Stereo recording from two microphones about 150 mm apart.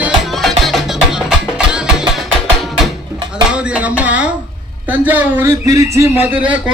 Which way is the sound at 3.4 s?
10° right (ahead or behind).